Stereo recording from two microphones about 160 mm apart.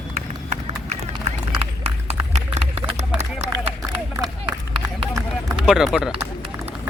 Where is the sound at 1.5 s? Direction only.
40° right (ahead or behind).